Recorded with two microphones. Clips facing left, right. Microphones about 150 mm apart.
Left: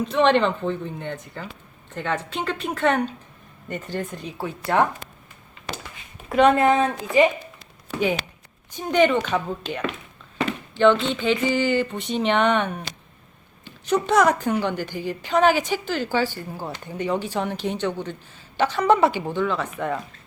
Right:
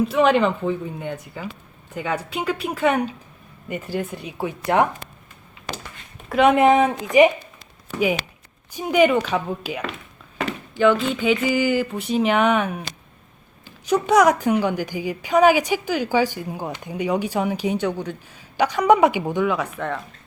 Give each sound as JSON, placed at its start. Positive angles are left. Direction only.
{"t": 0.0, "sound": "a woman's voice", "side_deg": -5}
{"t": 6.2, "sound": "a sound", "side_deg": 0}
{"t": 6.5, "sound": "a woman's voice", "side_deg": -20}
{"t": 13.8, "sound": "a woman's voice", "side_deg": -10}
{"t": 19.7, "sound": "speech", "side_deg": 5}